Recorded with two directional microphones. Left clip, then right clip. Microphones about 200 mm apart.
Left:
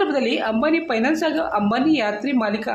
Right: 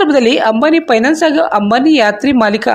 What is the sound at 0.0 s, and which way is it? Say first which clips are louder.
Speech: right 11 dB; 45° right (ahead or behind).